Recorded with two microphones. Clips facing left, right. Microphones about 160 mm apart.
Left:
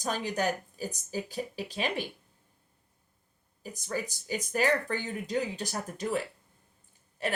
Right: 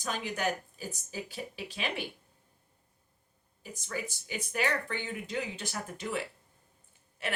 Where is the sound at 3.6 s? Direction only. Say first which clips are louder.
Left 4 dB; 40° left (ahead or behind).